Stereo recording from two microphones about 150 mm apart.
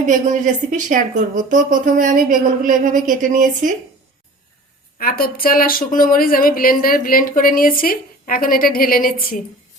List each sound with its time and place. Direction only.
0.1 s speech: 60° right (ahead or behind)
4.9 s speech: 80° left